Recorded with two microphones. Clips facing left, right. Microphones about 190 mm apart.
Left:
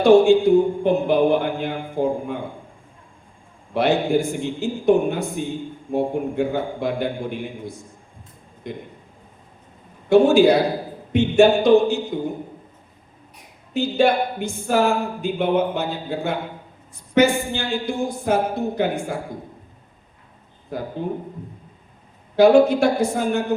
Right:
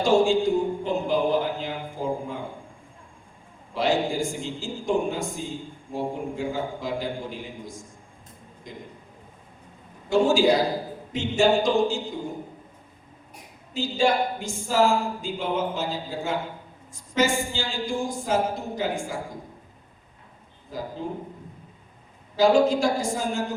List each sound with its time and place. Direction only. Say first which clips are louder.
0.0 s a sound: left 7 dB; 60° left (ahead or behind)
3.8 s a man's voice: left 5 dB; 60° left (ahead or behind)
10.1 s a man's voice: left 6 dB; 60° left (ahead or behind)
13.7 s a man's voice: left 5 dB; 60° left (ahead or behind)
20.7 s a man's voice: left 5 dB; 60° left (ahead or behind)
22.4 s a man's voice: left 6 dB; 60° left (ahead or behind)